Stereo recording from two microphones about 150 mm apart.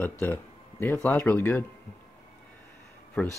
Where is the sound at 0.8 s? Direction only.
15° left (ahead or behind).